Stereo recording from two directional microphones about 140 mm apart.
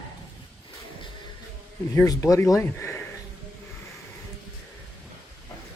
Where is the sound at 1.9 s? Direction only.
25° left (ahead or behind).